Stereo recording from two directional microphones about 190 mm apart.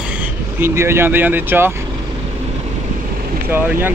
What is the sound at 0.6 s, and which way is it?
Speech, 15° right (ahead or behind).